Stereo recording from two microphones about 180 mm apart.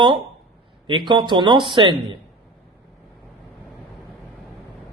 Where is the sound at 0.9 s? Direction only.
25° right (ahead or behind).